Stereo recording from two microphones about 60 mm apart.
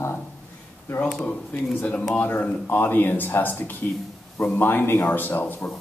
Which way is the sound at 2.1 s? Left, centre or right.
Left.